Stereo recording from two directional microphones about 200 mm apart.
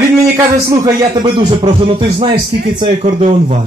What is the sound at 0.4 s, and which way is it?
Speech, 20° right (ahead or behind).